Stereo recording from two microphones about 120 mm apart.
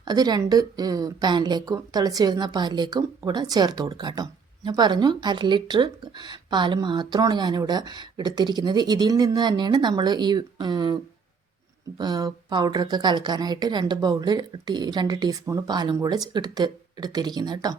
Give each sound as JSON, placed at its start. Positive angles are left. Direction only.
{"t": 0.0, "sound": "a woman's voice", "side_deg": -35}
{"t": 11.9, "sound": "a woman's voice", "side_deg": -35}